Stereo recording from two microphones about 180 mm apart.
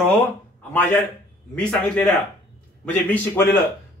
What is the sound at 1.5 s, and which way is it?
A man's voice, 5° left (ahead or behind).